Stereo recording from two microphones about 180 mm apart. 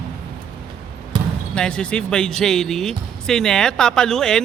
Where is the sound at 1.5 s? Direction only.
5° left (ahead or behind).